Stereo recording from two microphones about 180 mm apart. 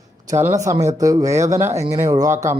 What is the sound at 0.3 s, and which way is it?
Speech, 15° right (ahead or behind).